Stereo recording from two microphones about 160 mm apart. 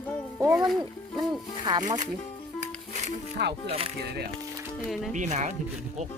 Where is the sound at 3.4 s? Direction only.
90° right.